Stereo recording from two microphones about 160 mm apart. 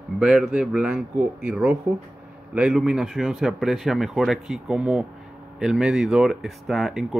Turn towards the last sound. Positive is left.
turn(degrees=0)  # may be behind; listen again after turning